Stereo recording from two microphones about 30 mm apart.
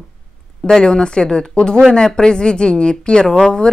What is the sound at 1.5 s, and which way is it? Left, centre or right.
A woman's voice, left.